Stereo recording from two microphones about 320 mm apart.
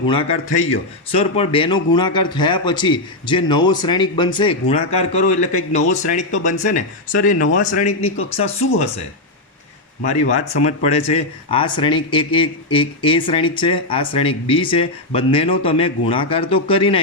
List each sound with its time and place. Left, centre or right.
0.1 s speech: centre
10.0 s speech: left